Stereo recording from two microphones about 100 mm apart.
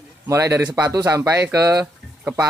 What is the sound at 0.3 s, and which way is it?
Speech, 30° right (ahead or behind).